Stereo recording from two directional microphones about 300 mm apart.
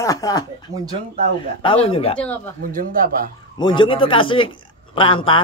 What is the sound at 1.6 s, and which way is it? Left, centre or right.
Speech, centre.